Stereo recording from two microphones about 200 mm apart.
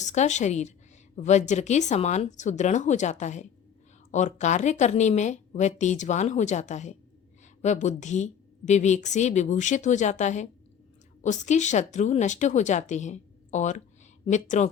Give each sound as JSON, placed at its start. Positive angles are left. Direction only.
{"t": 0.0, "sound": "a woman's voice", "side_deg": 35}